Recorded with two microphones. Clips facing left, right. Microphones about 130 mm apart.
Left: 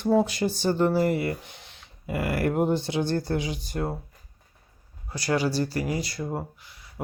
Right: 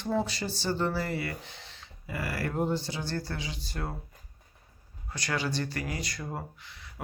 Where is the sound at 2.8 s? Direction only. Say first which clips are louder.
Left 10 dB; 60° left (ahead or behind).